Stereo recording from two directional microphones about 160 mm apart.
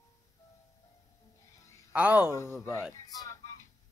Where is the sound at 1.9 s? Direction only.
10° right (ahead or behind).